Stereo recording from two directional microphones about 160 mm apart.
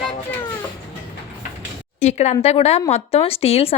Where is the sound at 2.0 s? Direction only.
45° left (ahead or behind).